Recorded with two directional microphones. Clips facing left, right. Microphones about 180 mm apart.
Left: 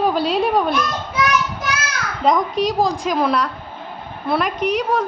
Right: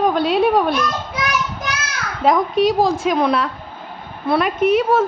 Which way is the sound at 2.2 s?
Centre (ahead or behind).